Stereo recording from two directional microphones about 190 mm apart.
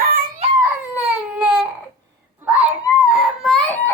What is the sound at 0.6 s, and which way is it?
Baby cry, 5° right (ahead or behind).